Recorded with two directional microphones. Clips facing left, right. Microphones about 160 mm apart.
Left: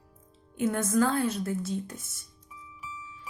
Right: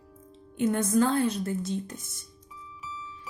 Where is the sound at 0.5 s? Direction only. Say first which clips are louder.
Right 2 dB; 5° left (ahead or behind).